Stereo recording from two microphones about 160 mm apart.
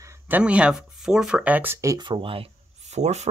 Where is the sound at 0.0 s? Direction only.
15° right (ahead or behind).